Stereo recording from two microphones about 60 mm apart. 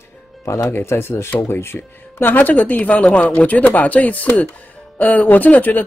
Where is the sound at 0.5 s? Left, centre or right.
Left.